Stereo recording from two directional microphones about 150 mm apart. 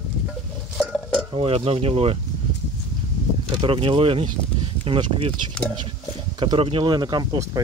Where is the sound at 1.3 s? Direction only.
40° right (ahead or behind).